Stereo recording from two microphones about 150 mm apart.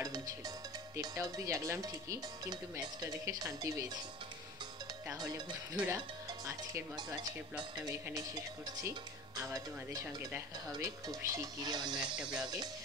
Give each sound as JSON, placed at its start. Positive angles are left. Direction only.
{"t": 0.9, "sound": "speech", "side_deg": -20}
{"t": 5.2, "sound": "speech", "side_deg": -25}